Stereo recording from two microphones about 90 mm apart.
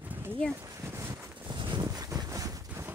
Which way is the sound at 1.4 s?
55° right (ahead or behind).